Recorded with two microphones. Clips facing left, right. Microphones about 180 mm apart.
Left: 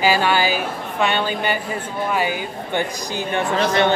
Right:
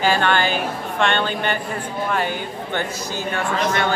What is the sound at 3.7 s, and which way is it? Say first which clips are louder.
Speech: left 5 dB; 25° left (ahead or behind).